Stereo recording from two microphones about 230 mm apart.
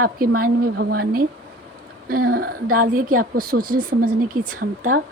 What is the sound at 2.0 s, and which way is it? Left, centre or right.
Speech, right.